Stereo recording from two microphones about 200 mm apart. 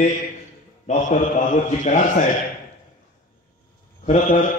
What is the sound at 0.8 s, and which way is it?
A man's voice, 40° left (ahead or behind).